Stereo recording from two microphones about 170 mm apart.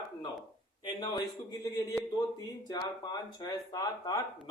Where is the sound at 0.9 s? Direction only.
25° left (ahead or behind).